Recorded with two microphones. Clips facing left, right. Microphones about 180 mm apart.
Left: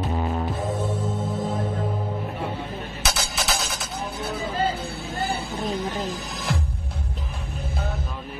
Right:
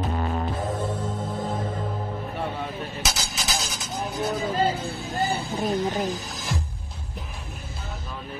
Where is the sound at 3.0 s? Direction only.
60° left (ahead or behind).